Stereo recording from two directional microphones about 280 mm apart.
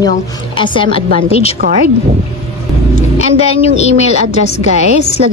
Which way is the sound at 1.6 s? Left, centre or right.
Right.